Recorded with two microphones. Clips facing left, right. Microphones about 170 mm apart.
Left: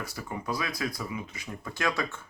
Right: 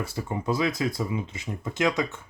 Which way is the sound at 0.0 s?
25° right (ahead or behind).